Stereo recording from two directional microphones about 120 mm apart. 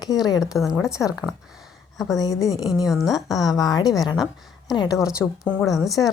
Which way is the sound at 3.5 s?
30° left (ahead or behind).